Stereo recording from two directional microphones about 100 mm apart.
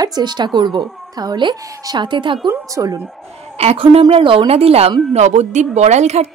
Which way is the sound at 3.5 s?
75° right (ahead or behind).